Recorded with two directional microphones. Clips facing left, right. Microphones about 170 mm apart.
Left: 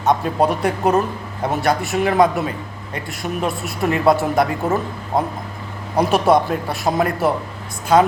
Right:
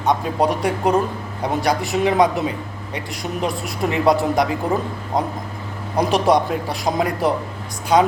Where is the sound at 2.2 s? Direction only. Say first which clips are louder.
Left 1 dB; 20° right (ahead or behind).